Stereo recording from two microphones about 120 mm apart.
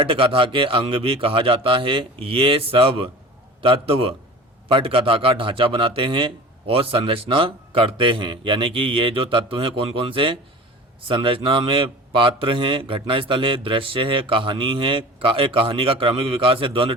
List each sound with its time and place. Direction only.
0.0 s a man's voice: 50° right (ahead or behind)